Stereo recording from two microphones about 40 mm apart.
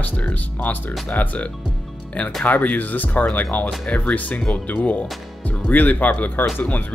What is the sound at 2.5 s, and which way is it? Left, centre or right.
Speech, left.